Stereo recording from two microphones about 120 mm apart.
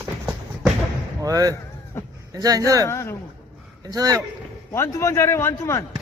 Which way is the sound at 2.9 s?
25° left (ahead or behind).